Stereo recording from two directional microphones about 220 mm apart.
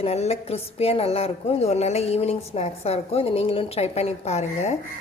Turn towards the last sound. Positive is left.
turn(degrees=30)  # may be behind; listen again after turning